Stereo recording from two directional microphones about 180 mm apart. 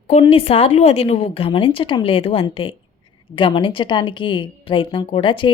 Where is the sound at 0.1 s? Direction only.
35° left (ahead or behind).